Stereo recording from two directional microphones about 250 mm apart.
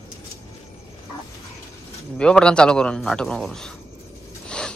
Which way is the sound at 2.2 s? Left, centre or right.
Centre.